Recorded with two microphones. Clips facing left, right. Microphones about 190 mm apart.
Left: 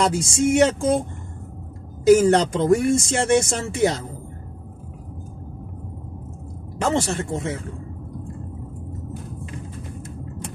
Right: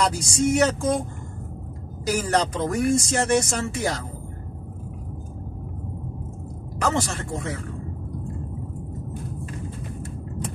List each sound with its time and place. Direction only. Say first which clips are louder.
0.0 s speech: left 2 dB; 25° left (ahead or behind)
2.2 s speech: left 6 dB; 30° left (ahead or behind)
6.8 s speech: left 3 dB; 30° left (ahead or behind)